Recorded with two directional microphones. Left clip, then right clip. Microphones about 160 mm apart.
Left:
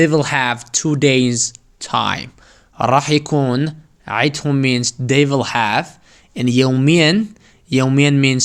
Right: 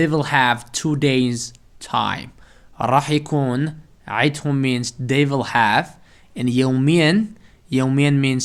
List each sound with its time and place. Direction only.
0.0 s a man's voice: 40° left (ahead or behind)